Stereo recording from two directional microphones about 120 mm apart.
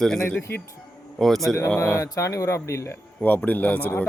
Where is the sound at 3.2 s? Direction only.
15° left (ahead or behind).